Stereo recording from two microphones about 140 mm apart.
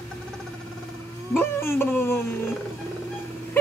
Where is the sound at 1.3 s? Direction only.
15° left (ahead or behind).